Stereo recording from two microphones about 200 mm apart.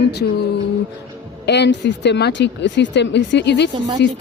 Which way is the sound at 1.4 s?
60° left (ahead or behind).